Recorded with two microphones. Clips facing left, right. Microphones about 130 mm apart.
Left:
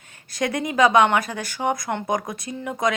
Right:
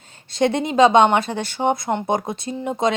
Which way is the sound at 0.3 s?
25° right (ahead or behind).